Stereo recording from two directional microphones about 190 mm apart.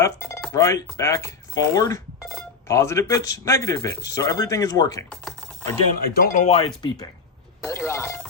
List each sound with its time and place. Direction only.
0.0 s dishes: 15° left (ahead or behind)
0.5 s a man's voice: 15° left (ahead or behind)
5.0 s typing: 5° left (ahead or behind)
5.7 s a man's voice: 15° left (ahead or behind)
6.1 s speech: 40° left (ahead or behind)
6.6 s a man's voice: 20° left (ahead or behind)